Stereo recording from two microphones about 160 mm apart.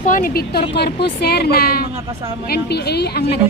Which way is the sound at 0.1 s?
65° left (ahead or behind).